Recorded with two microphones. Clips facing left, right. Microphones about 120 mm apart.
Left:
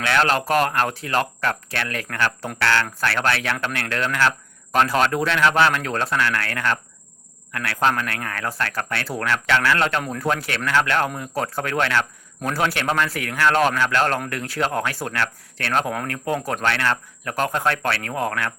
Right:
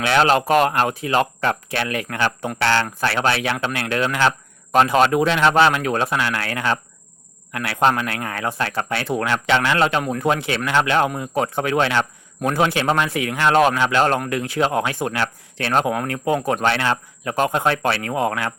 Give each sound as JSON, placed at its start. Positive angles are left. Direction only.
{"t": 0.0, "sound": "a man's voice", "side_deg": -20}
{"t": 16.6, "sound": "a man's voice", "side_deg": -20}